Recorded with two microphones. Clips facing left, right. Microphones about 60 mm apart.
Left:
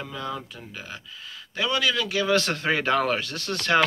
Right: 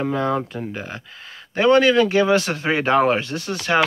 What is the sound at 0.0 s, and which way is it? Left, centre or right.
Speech, right.